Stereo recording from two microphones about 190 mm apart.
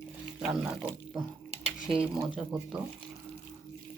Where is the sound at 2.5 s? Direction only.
Centre (ahead or behind).